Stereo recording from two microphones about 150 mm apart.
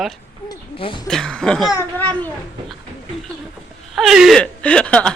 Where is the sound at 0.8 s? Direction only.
35° left (ahead or behind).